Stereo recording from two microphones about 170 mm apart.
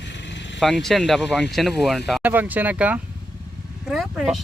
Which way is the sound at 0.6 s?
Centre (ahead or behind).